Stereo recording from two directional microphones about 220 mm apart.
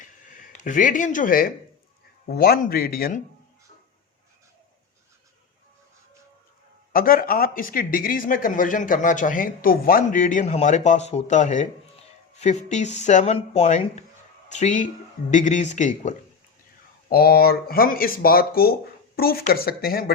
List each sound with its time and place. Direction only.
0.0 s a sound: 35° left (ahead or behind)
2.2 s speech: 45° left (ahead or behind)
6.9 s speech: 40° left (ahead or behind)
17.1 s speech: 45° left (ahead or behind)